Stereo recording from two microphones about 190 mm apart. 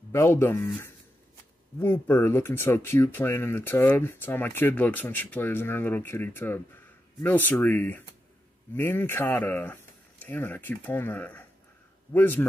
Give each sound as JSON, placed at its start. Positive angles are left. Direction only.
{"t": 0.1, "sound": "speech", "side_deg": 15}